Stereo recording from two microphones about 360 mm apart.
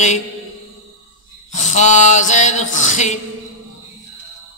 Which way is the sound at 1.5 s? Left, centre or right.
Centre.